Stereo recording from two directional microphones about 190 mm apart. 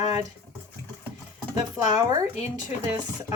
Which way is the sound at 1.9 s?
20° right (ahead or behind).